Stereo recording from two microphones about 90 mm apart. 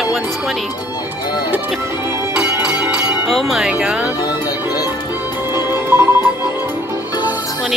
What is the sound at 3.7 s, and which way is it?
Music, 10° right (ahead or behind).